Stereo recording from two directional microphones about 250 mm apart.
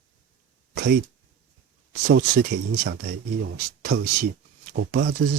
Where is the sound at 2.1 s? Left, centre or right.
Right.